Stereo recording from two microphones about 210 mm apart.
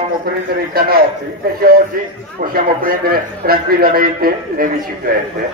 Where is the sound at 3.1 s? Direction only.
45° right (ahead or behind).